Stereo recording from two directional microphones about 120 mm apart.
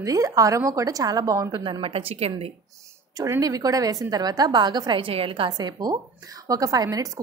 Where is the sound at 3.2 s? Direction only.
30° right (ahead or behind).